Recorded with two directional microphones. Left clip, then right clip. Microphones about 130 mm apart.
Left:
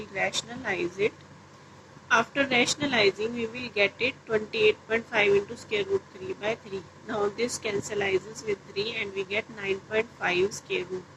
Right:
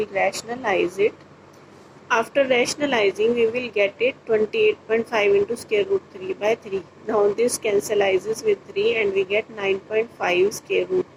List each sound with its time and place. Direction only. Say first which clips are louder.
0.0 s speech: right 7 dB; 20° right (ahead or behind)